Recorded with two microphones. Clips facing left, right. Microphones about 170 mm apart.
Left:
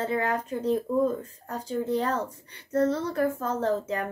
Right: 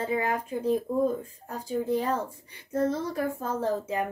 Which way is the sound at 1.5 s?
10° right (ahead or behind).